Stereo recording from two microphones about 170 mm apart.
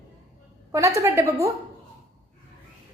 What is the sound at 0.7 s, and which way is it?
Speech, 15° right (ahead or behind).